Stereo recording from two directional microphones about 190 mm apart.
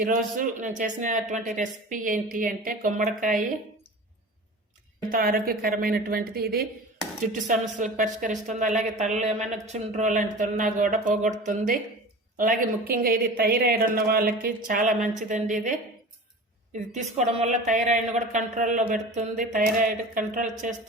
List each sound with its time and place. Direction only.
0.0 s speech: 45° right (ahead or behind)
5.1 s speech: 50° right (ahead or behind)
7.4 s speech: 40° right (ahead or behind)